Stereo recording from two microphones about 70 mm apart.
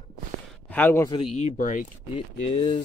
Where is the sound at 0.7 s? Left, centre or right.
Left.